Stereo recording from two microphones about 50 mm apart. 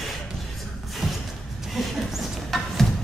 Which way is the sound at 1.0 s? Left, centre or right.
Centre.